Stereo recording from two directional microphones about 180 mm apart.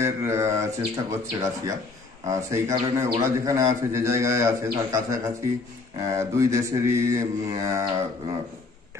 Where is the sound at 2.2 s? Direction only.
15° right (ahead or behind).